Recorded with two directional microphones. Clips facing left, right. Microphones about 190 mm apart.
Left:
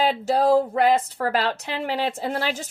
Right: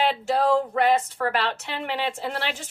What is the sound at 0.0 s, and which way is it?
A woman's voice, 40° left (ahead or behind).